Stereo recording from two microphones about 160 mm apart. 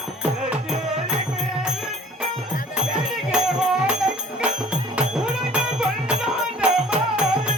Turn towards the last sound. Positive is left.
turn(degrees=-5)  # may be behind; listen again after turning